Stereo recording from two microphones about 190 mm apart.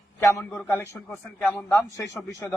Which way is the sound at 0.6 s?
10° left (ahead or behind).